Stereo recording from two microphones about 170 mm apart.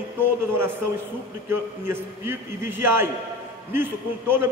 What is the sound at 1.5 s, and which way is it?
A man's voice, 10° right (ahead or behind).